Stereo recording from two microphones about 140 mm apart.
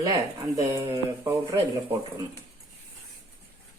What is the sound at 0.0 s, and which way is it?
Speech, 25° right (ahead or behind).